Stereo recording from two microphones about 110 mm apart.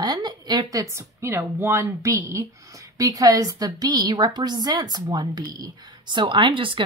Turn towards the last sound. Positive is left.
turn(degrees=-50)  # may be behind; listen again after turning